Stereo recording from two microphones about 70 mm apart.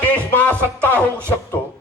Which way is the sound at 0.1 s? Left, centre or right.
Left.